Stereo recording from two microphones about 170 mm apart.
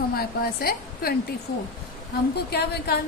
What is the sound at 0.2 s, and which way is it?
Speech, 65° left (ahead or behind).